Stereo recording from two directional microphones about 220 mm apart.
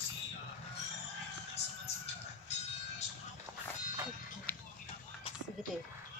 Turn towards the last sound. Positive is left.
turn(degrees=10)  # may be behind; listen again after turning